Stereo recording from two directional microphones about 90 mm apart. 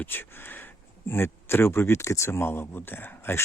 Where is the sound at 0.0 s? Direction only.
25° left (ahead or behind).